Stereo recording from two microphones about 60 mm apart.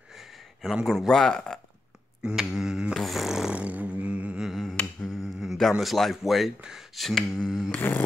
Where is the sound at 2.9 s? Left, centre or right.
Centre.